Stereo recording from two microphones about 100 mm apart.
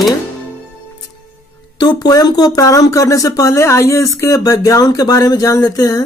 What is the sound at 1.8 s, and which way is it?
Speech, 45° left (ahead or behind).